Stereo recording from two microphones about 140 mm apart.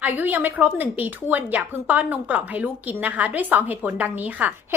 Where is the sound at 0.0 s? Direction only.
15° right (ahead or behind).